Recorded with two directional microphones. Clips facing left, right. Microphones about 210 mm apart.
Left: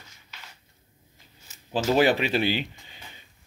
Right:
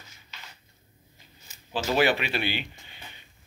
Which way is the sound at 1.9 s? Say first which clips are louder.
Left 3 dB; 35° left (ahead or behind).